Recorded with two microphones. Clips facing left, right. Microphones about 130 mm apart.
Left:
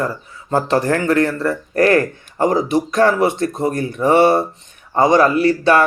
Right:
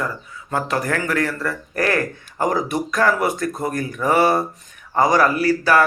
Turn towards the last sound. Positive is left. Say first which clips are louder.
# left 3 dB
turn(degrees=25)  # may be behind; listen again after turning